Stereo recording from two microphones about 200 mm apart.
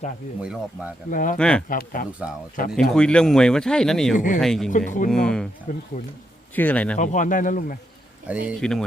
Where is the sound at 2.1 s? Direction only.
5° right (ahead or behind).